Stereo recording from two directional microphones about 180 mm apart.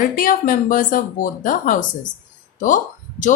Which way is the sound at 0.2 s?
50° left (ahead or behind).